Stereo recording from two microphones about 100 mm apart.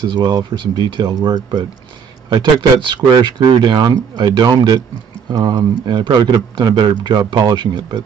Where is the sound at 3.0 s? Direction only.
45° right (ahead or behind).